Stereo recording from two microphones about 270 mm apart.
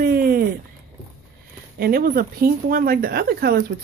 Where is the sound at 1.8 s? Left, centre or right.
Right.